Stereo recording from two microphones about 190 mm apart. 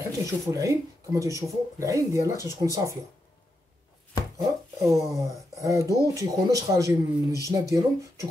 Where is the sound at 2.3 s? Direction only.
20° left (ahead or behind).